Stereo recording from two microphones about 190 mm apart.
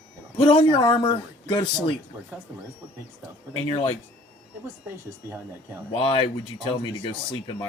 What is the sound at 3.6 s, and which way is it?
Speech, 25° left (ahead or behind).